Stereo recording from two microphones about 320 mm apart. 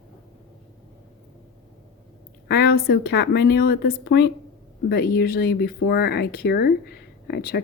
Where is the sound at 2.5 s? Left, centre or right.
Left.